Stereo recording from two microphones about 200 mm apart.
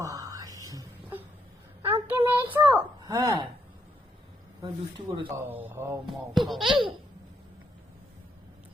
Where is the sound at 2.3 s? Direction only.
10° right (ahead or behind).